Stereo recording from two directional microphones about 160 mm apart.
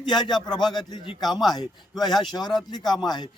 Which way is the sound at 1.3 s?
Centre (ahead or behind).